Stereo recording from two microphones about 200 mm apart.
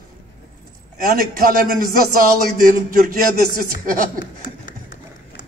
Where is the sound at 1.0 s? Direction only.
45° right (ahead or behind).